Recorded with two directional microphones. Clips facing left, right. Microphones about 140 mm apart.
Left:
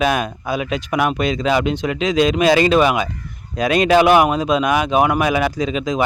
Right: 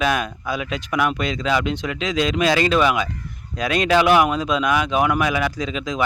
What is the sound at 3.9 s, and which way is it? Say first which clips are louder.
Speech: left 3 dB; 50° left (ahead or behind).